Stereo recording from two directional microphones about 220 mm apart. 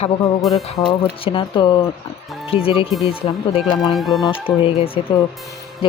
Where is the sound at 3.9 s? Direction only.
Centre (ahead or behind).